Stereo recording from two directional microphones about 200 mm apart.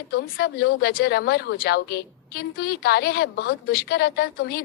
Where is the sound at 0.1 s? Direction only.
50° left (ahead or behind).